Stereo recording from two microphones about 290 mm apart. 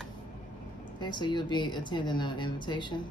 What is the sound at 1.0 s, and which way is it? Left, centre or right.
A woman's voice, centre.